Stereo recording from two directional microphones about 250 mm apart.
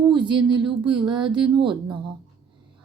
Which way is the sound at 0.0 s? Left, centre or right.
Centre.